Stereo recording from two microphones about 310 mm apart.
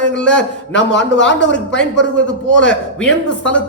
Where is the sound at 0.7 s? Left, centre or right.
Left.